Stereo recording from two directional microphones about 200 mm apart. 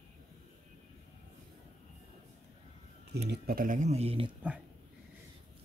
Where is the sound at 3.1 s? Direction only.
50° right (ahead or behind); by 4.3 s 30° right (ahead or behind).